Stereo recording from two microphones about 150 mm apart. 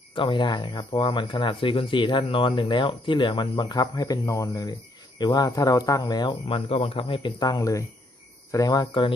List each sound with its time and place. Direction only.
0.1 s speech: 30° left (ahead or behind)